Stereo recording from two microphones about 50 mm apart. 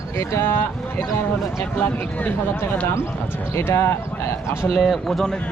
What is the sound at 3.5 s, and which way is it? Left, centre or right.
Speech, left.